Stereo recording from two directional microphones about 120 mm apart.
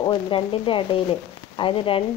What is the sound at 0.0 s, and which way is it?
Speech, 45° left (ahead or behind).